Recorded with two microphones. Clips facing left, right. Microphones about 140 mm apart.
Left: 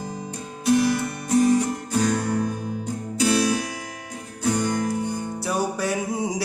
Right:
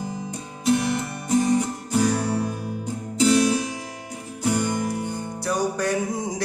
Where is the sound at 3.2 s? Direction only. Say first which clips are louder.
Right 3 dB; 20° right (ahead or behind).